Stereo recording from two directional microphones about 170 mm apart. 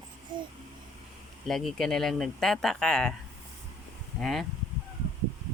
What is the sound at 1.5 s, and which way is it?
Speech, centre (ahead or behind).